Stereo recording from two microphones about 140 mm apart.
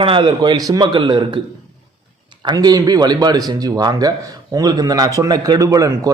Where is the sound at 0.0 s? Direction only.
35° right (ahead or behind).